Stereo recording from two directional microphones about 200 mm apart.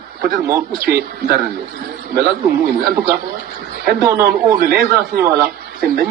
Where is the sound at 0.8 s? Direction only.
55° right (ahead or behind).